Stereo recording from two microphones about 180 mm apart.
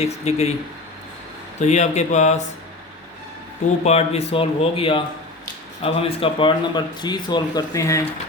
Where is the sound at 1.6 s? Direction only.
40° left (ahead or behind).